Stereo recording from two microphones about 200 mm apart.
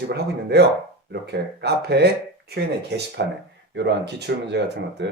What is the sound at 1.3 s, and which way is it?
Speech, 55° right (ahead or behind).